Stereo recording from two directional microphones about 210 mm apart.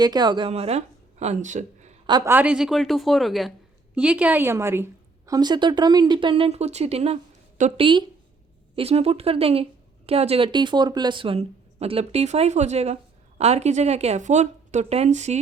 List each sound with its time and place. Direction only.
0.0 s speech: 20° right (ahead or behind); by 1.9 s 35° right (ahead or behind)
2.0 s a woman's voice: 15° right (ahead or behind); by 15.4 s 35° right (ahead or behind)